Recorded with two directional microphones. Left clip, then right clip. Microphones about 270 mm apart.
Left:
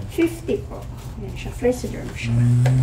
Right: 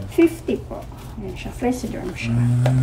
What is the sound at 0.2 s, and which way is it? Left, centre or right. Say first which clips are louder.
Speech: right 3 dB; centre.